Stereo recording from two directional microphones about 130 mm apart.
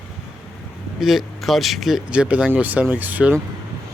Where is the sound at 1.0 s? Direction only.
Centre (ahead or behind).